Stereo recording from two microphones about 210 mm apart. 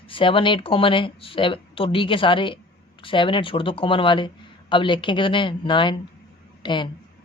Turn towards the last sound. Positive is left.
turn(degrees=20)  # may be behind; listen again after turning